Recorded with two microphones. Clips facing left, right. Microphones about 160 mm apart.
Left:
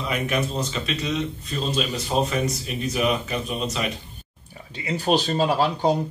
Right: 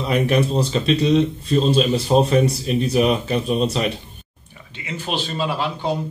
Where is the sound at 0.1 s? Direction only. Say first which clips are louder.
Right 8 dB; 30° right (ahead or behind).